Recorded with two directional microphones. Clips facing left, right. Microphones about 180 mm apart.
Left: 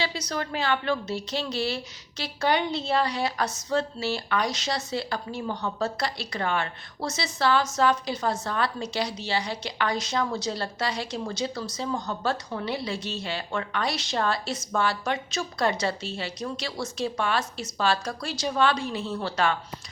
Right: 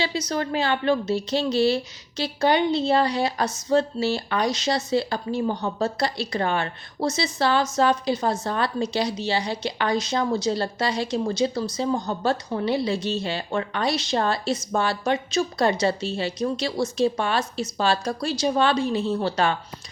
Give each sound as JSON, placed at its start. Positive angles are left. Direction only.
{"t": 0.0, "sound": "a woman's voice", "side_deg": -25}